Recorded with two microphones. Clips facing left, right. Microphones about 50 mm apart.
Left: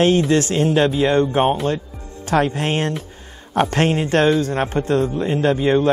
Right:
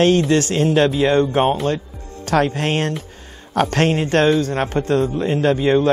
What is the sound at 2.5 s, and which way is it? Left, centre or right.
A man's voice, right.